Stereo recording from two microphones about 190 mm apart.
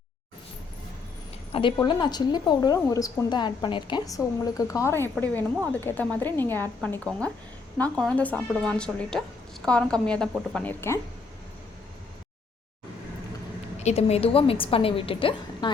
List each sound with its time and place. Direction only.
1.5 s a woman's voice: 25° left (ahead or behind)
13.7 s speech: 35° left (ahead or behind)